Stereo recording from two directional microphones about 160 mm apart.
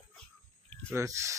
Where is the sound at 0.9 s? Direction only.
20° right (ahead or behind).